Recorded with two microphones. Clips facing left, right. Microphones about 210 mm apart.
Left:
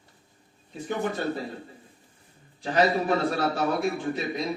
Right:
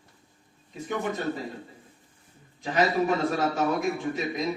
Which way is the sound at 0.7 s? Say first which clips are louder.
Left 1 dB; 30° left (ahead or behind).